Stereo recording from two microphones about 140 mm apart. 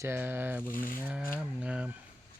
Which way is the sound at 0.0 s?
15° right (ahead or behind).